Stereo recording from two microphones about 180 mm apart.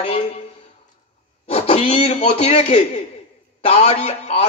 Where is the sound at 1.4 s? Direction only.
35° left (ahead or behind).